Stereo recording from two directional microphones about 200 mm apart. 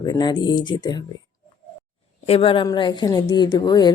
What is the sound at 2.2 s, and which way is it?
Speech, 30° left (ahead or behind).